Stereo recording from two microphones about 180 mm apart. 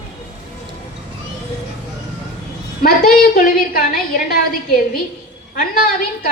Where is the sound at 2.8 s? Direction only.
55° left (ahead or behind).